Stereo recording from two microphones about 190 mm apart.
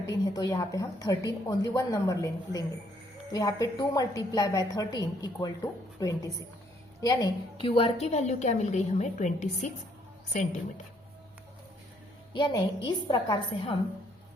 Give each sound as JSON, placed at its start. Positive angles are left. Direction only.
{"t": 0.1, "sound": "a woman's voice", "side_deg": 20}
{"t": 12.3, "sound": "a woman's voice", "side_deg": 25}